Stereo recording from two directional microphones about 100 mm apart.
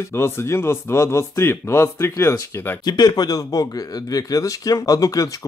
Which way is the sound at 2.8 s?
45° left (ahead or behind).